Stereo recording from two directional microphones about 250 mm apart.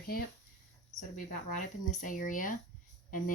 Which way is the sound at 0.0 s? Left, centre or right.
Left.